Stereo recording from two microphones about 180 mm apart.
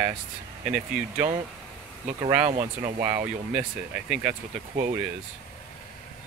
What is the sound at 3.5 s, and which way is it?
Speech, 5° right (ahead or behind).